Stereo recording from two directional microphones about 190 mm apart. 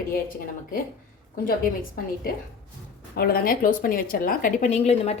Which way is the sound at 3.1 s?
50° left (ahead or behind).